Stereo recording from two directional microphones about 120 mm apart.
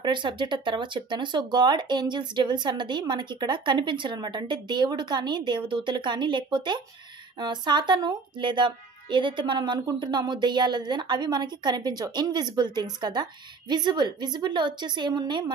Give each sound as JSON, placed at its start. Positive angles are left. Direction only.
{"t": 0.0, "sound": "speech", "side_deg": -40}